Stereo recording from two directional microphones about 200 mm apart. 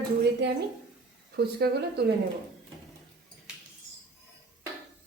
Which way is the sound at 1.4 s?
55° right (ahead or behind).